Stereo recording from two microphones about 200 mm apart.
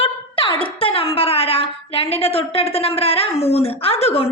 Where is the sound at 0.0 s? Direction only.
25° left (ahead or behind).